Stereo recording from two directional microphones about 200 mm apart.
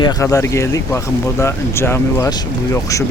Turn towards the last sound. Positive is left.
turn(degrees=15)  # may be behind; listen again after turning